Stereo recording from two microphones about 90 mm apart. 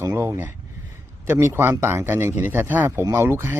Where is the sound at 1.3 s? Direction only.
25° right (ahead or behind).